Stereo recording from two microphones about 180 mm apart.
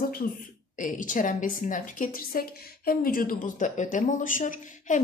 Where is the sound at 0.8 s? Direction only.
45° left (ahead or behind).